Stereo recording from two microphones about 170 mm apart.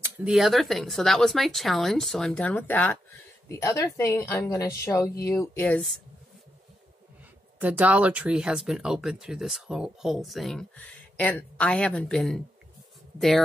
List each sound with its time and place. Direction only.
0.0 s a woman's voice: 5° right (ahead or behind)
7.5 s speech: 10° right (ahead or behind)